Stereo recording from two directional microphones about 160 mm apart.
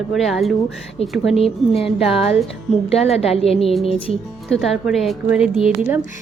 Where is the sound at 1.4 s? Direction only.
35° left (ahead or behind).